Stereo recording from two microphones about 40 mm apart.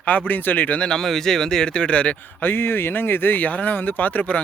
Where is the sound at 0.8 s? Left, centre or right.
Centre.